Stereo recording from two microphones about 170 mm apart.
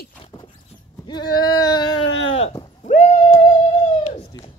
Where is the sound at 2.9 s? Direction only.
45° left (ahead or behind).